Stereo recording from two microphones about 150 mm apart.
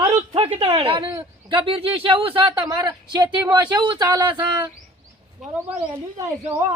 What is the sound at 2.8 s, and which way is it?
Speech, 25° right (ahead or behind).